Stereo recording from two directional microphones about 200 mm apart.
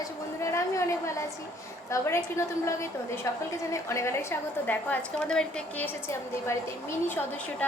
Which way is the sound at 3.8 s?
15° left (ahead or behind).